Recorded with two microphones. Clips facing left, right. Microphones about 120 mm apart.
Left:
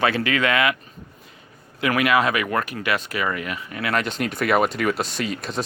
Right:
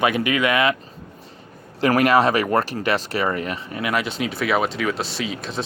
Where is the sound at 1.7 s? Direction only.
40° right (ahead or behind).